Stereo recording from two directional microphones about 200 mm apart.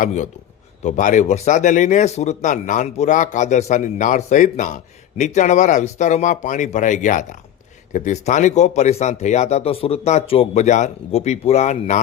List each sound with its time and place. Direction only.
0.0 s speech: 35° left (ahead or behind)